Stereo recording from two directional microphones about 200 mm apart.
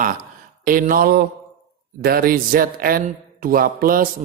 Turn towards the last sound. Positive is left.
turn(degrees=-45)  # may be behind; listen again after turning